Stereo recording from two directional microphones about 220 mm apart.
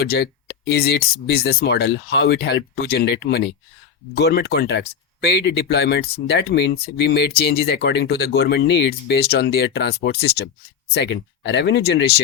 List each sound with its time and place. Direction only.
0.0 s speech: 45° left (ahead or behind)